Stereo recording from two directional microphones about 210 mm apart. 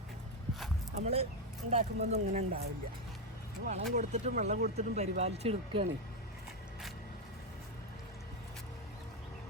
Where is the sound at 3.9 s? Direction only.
35° right (ahead or behind).